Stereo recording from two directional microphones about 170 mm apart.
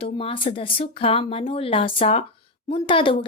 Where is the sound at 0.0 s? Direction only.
35° left (ahead or behind).